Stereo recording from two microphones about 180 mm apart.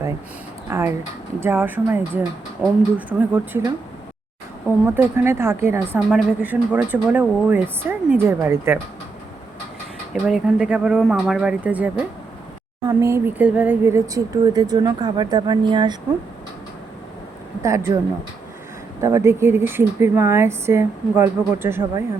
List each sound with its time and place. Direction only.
0.7 s speech: 15° right (ahead or behind)
2.6 s speech: centre (ahead or behind)
4.9 s speech: 15° right (ahead or behind)
10.2 s speech: 5° right (ahead or behind); by 16.0 s 25° right (ahead or behind)
17.6 s speech: 15° right (ahead or behind)
19.0 s speech: 15° right (ahead or behind)